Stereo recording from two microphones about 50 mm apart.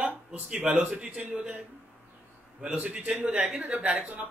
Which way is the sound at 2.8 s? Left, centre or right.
Right.